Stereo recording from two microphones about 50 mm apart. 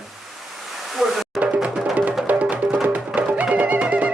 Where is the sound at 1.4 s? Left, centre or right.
Right.